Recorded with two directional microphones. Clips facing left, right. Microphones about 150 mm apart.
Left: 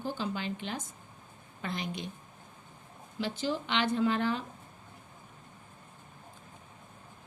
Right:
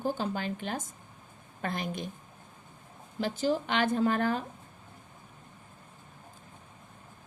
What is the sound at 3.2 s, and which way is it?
A woman's voice, 45° right (ahead or behind).